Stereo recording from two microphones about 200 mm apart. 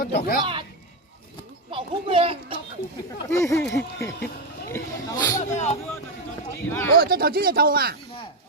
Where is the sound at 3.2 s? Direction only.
15° left (ahead or behind).